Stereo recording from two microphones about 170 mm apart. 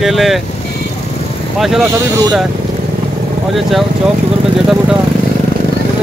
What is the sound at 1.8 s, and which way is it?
Speech, 15° right (ahead or behind).